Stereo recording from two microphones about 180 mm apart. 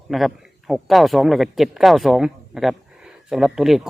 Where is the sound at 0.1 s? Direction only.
Centre (ahead or behind).